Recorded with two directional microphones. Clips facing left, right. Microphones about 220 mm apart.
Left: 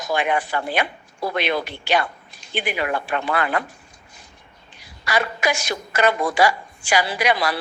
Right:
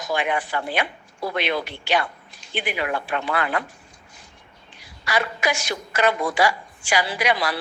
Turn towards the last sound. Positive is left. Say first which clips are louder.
# left 2 dB
turn(degrees=45)  # may be behind; listen again after turning